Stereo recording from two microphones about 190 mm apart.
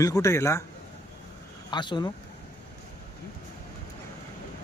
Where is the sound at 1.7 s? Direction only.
25° left (ahead or behind).